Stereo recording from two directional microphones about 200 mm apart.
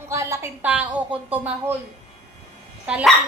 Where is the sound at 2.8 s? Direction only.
5° right (ahead or behind).